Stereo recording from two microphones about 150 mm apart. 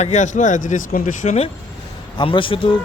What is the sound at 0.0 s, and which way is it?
Speech, 55° left (ahead or behind).